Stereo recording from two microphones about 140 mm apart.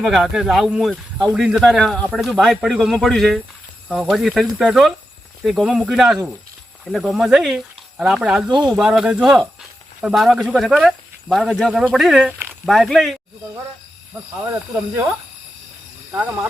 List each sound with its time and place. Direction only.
0.0 s speech: centre (ahead or behind)
8.4 s speech: 30° right (ahead or behind)
8.7 s speech: 10° right (ahead or behind)
16.1 s speech: 10° right (ahead or behind)